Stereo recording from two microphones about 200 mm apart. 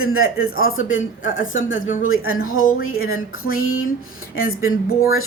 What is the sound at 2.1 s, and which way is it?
Speech, 90° left.